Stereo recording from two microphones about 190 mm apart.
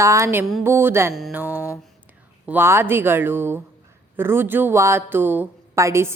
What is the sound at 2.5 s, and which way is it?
A woman's voice, 10° right (ahead or behind).